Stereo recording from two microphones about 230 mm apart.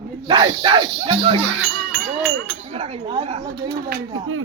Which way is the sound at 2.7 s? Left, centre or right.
Right.